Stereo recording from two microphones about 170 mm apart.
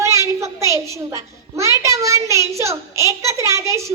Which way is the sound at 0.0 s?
15° right (ahead or behind).